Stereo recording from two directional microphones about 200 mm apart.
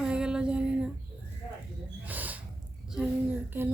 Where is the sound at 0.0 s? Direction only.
5° right (ahead or behind).